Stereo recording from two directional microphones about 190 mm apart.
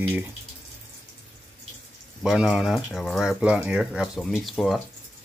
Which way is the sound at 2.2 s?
5° right (ahead or behind).